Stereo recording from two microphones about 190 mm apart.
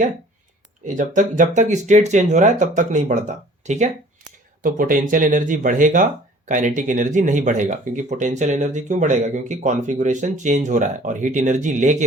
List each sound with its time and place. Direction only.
0.9 s speech: 40° right (ahead or behind)